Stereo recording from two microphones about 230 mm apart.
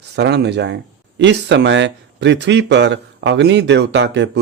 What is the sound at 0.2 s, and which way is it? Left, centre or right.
Speech, right.